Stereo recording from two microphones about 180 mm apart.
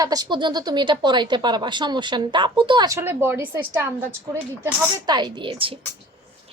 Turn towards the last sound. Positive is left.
turn(degrees=-30)  # may be behind; listen again after turning